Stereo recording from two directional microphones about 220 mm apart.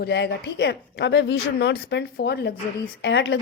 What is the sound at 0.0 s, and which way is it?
Speech, 50° left (ahead or behind).